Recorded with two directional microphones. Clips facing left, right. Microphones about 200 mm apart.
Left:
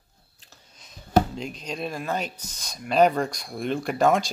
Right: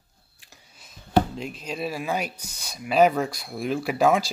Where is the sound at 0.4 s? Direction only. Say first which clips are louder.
Even; 10° right (ahead or behind).